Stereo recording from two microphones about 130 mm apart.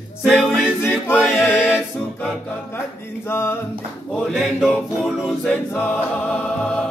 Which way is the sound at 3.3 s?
20° left (ahead or behind).